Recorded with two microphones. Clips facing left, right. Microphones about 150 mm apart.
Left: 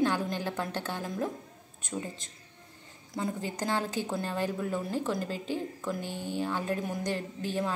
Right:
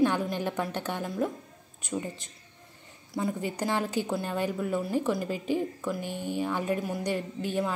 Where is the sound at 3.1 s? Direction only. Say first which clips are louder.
Right 3 dB; 5° right (ahead or behind).